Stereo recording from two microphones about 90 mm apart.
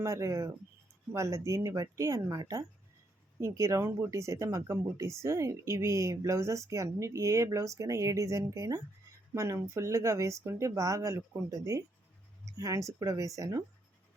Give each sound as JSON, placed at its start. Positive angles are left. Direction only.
{"t": 0.0, "sound": "speech", "side_deg": -35}
{"t": 3.4, "sound": "speech", "side_deg": -35}